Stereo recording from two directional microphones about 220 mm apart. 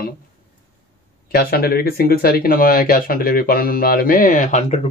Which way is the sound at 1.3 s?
45° left (ahead or behind).